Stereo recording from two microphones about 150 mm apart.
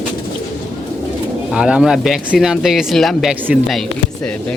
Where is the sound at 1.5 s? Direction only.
5° right (ahead or behind).